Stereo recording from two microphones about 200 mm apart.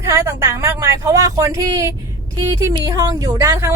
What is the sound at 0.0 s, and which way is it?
Speech, 15° right (ahead or behind).